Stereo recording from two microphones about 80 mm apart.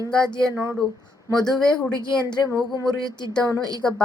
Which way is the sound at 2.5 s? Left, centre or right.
Right.